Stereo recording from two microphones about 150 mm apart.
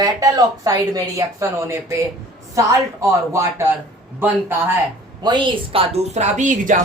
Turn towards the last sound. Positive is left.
turn(degrees=-55)  # may be behind; listen again after turning